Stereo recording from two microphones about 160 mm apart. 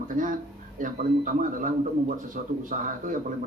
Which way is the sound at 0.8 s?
55° right (ahead or behind).